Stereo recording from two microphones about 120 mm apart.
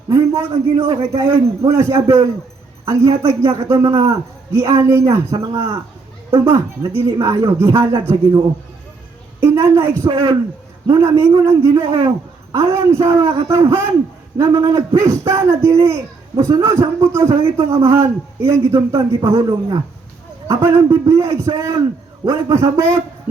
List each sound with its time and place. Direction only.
0.1 s a man's voice: 25° right (ahead or behind)
9.4 s a man's voice: 20° right (ahead or behind)